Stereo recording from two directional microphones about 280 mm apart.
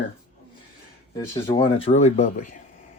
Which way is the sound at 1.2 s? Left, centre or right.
Centre.